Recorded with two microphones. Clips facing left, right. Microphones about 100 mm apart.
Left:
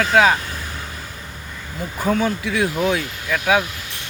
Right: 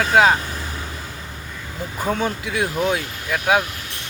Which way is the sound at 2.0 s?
20° right (ahead or behind).